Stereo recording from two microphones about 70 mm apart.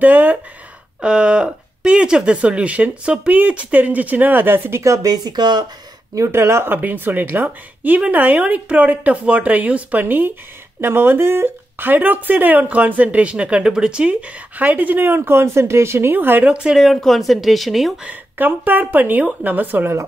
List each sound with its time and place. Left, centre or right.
0.0 s speech: right
1.0 s speech: centre; by 5.1 s right
5.1 s speech: right
6.1 s speech: right
16.4 s a woman's voice: centre
16.7 s speech: centre
18.0 s speech: right